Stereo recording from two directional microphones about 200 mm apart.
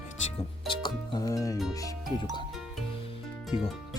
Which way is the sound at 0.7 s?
20° left (ahead or behind).